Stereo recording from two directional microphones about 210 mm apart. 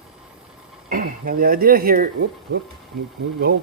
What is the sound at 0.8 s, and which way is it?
Speech, 40° right (ahead or behind).